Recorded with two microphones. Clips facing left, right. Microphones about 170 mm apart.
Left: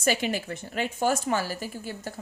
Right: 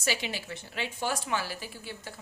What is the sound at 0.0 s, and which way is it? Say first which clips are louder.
A woman's voice: left 7 dB; 50° left (ahead or behind).